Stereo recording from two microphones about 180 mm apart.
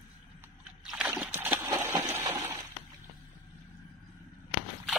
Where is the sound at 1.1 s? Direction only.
10° right (ahead or behind).